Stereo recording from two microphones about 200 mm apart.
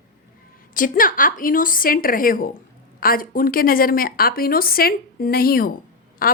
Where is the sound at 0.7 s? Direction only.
45° left (ahead or behind).